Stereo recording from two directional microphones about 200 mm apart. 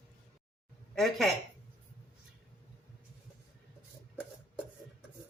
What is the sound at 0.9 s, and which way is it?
Speech, centre (ahead or behind).